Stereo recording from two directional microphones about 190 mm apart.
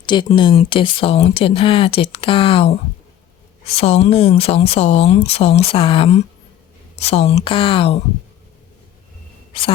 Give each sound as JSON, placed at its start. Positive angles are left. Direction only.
{"t": 0.0, "sound": "speech", "side_deg": 25}
{"t": 9.5, "sound": "speech", "side_deg": 30}